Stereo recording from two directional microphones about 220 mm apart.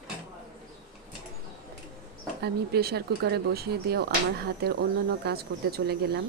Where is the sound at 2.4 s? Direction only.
45° right (ahead or behind).